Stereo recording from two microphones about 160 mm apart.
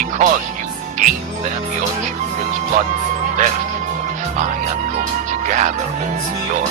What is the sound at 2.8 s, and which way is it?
Speech, 55° right (ahead or behind).